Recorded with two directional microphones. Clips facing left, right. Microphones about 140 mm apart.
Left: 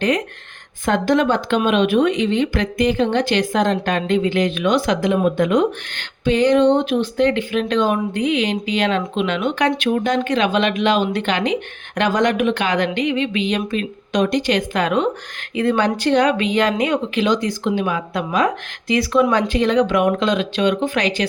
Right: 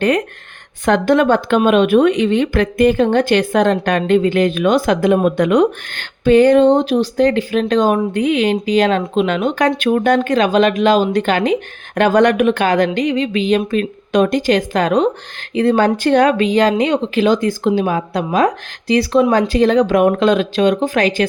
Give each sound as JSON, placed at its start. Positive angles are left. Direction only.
{"t": 0.9, "sound": "speech", "side_deg": -60}
{"t": 5.9, "sound": "speech", "side_deg": -50}
{"t": 9.9, "sound": "speech", "side_deg": -55}
{"t": 13.7, "sound": "speech", "side_deg": -50}
{"t": 16.0, "sound": "speech", "side_deg": -50}
{"t": 17.2, "sound": "speech", "side_deg": -45}